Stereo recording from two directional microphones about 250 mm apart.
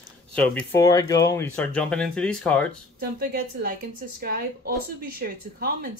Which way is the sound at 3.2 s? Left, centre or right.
Right.